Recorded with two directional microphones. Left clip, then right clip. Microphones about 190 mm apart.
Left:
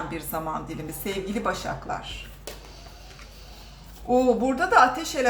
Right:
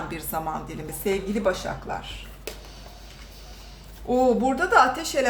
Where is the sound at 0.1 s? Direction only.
20° right (ahead or behind).